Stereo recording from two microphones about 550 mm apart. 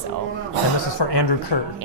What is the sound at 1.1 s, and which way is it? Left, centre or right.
Speech, left.